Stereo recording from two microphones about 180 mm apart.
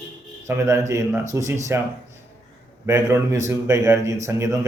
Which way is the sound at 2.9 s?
15° right (ahead or behind).